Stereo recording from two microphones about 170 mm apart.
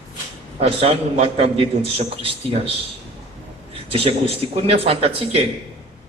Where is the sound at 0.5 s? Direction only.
40° right (ahead or behind).